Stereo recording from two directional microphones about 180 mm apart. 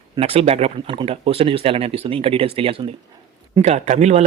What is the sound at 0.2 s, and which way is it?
Speech, 35° right (ahead or behind).